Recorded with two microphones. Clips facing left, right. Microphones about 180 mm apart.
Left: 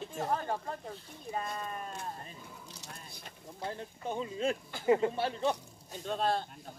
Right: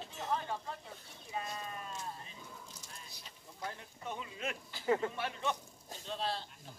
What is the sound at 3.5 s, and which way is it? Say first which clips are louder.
Speech: left 5 dB; 30° left (ahead or behind).